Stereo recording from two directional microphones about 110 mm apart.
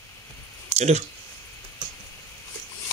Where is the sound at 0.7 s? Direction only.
90° right.